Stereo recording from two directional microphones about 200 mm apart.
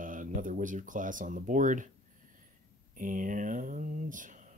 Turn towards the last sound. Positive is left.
turn(degrees=-40)  # may be behind; listen again after turning